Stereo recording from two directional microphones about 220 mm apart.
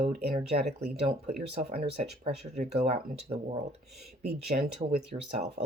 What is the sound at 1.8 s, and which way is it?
Speech, 30° right (ahead or behind).